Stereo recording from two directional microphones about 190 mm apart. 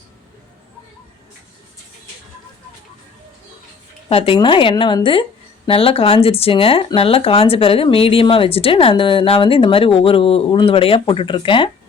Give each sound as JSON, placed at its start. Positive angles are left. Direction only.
{"t": 4.1, "sound": "speech", "side_deg": 30}